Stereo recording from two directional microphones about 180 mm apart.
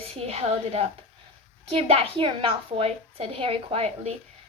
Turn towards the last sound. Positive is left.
turn(degrees=-35)  # may be behind; listen again after turning